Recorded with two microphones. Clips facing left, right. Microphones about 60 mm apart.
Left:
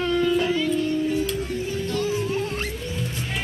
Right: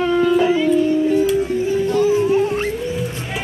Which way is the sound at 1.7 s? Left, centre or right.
Centre.